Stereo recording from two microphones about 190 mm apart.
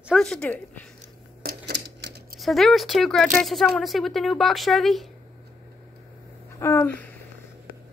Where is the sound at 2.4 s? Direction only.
Centre (ahead or behind).